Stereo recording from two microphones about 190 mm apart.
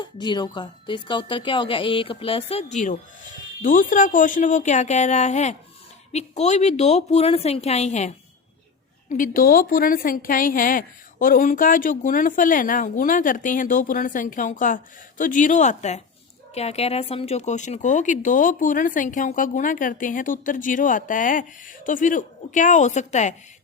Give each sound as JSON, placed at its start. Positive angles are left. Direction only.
{"t": 0.0, "sound": "a woman's voice", "side_deg": 25}